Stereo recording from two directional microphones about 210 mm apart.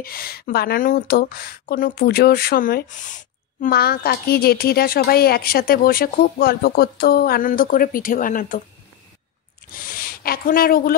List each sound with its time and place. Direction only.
0.0 s a woman's voice: 45° left (ahead or behind)
9.8 s speech: 45° left (ahead or behind)